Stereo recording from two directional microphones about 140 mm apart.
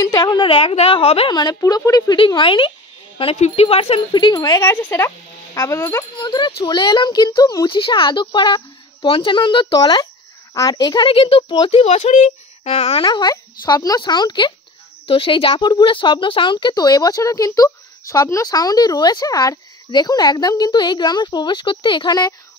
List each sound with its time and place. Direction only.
0.0 s speech: 30° left (ahead or behind)
1.3 s speech: 30° left (ahead or behind)
3.2 s speech: 45° left (ahead or behind); by 4.6 s 30° left (ahead or behind)
4.6 s speech: 15° left (ahead or behind)
6.1 s speech: 30° left (ahead or behind)